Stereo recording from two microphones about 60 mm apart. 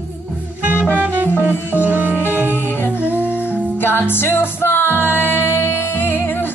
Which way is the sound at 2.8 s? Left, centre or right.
Right.